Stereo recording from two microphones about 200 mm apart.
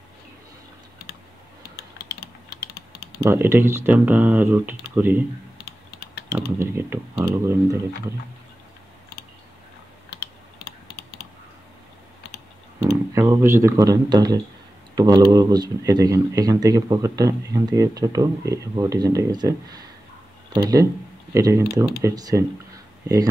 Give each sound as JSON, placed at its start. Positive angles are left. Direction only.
{"t": 3.2, "sound": "speech", "side_deg": -10}
{"t": 6.6, "sound": "speech", "side_deg": -10}
{"t": 12.8, "sound": "speech", "side_deg": -15}